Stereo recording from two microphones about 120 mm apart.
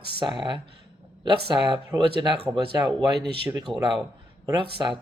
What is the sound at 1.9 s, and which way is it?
Speech, 40° right (ahead or behind).